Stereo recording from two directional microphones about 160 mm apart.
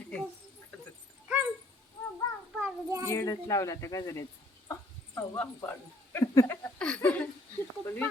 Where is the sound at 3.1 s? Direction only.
20° left (ahead or behind).